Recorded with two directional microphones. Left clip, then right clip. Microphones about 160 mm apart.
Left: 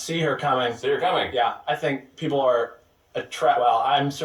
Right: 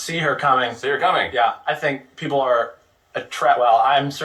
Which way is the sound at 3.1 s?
10° left (ahead or behind).